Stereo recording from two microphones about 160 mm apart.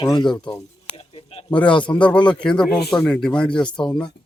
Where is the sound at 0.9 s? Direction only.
35° left (ahead or behind).